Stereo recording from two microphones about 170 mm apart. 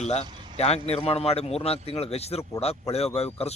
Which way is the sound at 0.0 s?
40° left (ahead or behind).